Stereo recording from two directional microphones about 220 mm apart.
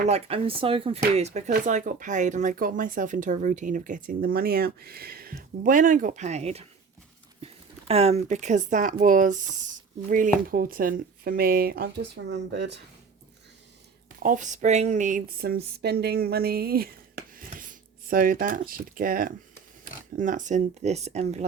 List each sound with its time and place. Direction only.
0.1 s speech: 25° right (ahead or behind); by 12.8 s 50° right (ahead or behind)
14.2 s a woman's voice: 35° right (ahead or behind)